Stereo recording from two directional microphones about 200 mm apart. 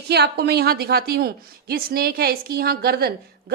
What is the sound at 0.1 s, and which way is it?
Speech, 55° right (ahead or behind).